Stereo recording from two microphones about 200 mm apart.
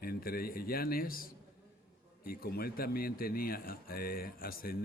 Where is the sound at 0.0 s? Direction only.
50° left (ahead or behind).